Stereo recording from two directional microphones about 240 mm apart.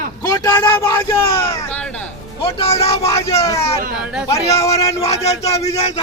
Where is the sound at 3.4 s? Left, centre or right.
Centre.